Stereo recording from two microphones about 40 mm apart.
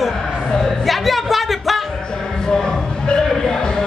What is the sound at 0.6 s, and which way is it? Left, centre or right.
Music, centre.